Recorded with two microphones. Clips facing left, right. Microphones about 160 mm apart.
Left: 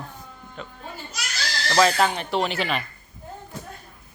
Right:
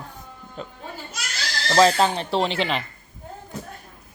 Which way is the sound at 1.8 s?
30° right (ahead or behind).